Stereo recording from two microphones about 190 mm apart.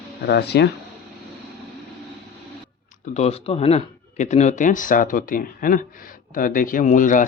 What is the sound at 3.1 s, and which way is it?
Speech, 35° left (ahead or behind).